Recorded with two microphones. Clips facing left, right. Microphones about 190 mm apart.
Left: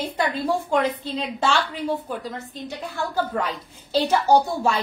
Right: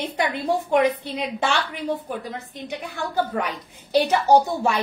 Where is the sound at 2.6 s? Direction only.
20° right (ahead or behind).